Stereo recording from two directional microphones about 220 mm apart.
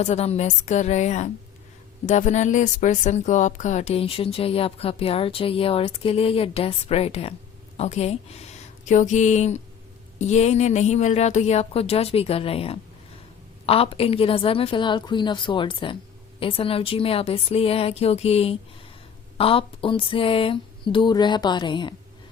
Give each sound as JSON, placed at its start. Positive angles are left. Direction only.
{"t": 0.0, "sound": "a woman's voice", "side_deg": 30}